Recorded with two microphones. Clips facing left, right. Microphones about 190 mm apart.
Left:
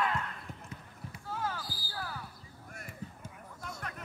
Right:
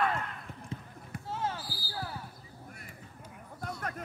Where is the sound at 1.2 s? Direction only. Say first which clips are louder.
Right 2 dB; 25° right (ahead or behind).